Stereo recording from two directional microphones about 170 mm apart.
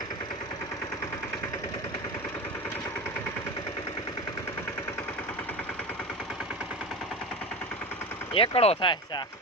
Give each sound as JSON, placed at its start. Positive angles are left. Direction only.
{"t": 8.3, "sound": "speech", "side_deg": 35}